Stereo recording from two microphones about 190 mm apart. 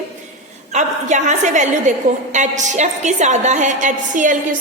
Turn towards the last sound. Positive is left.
turn(degrees=-45)  # may be behind; listen again after turning